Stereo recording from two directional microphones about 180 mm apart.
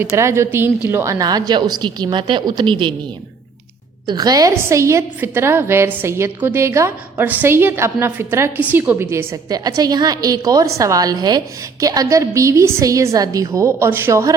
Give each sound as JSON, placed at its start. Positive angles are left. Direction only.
{"t": 0.2, "sound": "a woman's voice", "side_deg": -15}
{"t": 4.0, "sound": "a woman's voice", "side_deg": -25}